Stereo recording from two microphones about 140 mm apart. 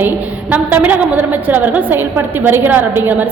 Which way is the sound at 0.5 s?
10° right (ahead or behind).